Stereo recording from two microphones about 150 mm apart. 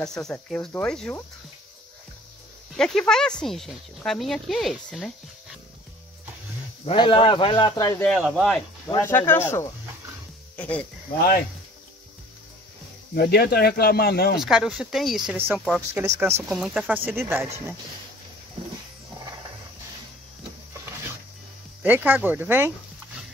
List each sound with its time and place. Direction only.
0.0 s speech: 5° left (ahead or behind)
2.7 s speech: 5° left (ahead or behind)
7.0 s speech: 35° left (ahead or behind)
8.0 s speech: 5° left (ahead or behind)
8.8 s speech: 15° left (ahead or behind)
13.1 s speech: 90° left
14.4 s speech: 5° right (ahead or behind)
15.3 s speech: 15° right (ahead or behind)
21.8 s speech: 10° right (ahead or behind)